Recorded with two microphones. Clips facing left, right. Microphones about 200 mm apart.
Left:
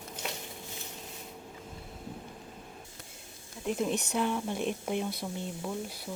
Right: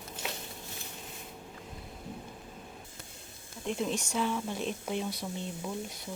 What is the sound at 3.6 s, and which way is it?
Speech, 5° left (ahead or behind).